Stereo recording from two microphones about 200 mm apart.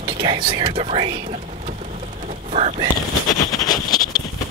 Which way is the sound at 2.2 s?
30° right (ahead or behind).